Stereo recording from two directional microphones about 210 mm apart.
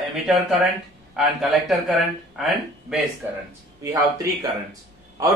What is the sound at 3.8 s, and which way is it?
A man's voice, 15° right (ahead or behind).